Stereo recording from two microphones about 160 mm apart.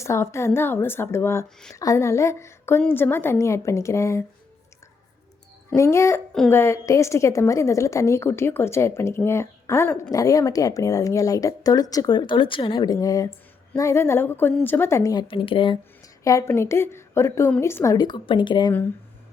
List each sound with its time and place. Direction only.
0.0 s a woman's voice: 15° left (ahead or behind)
5.7 s a woman's voice: 20° left (ahead or behind)
16.2 s a woman's voice: 15° left (ahead or behind)